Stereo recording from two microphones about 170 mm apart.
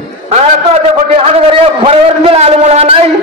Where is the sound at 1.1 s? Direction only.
35° right (ahead or behind).